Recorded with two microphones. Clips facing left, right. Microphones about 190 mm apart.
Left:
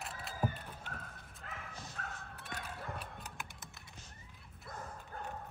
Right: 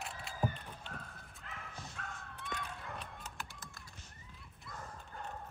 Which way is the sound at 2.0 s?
45° left (ahead or behind).